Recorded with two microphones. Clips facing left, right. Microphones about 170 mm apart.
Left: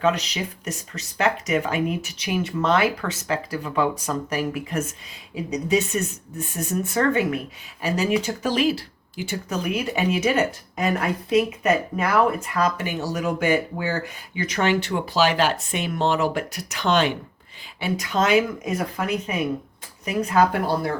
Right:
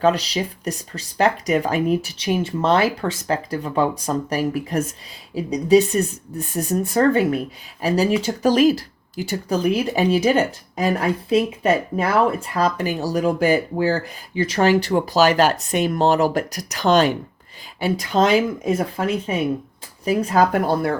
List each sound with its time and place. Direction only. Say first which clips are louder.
0.0 s speech: right 4 dB; 35° right (ahead or behind)
20.1 s speech: right 3 dB; 40° right (ahead or behind)